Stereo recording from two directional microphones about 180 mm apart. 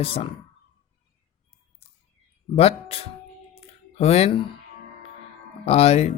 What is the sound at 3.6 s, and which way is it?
Music, 35° left (ahead or behind).